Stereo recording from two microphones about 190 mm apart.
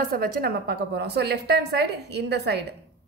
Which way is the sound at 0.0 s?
50° right (ahead or behind).